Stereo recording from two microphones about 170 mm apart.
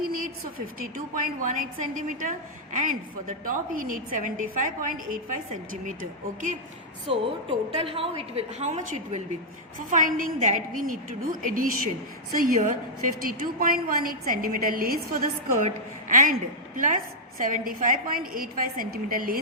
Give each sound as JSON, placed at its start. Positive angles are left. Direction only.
{"t": 0.8, "sound": "a woman's voice", "side_deg": -55}
{"t": 7.1, "sound": "a woman's voice", "side_deg": -35}
{"t": 15.5, "sound": "a woman's voice", "side_deg": -50}